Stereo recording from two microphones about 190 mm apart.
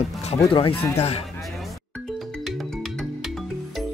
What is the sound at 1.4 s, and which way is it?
Music, centre (ahead or behind).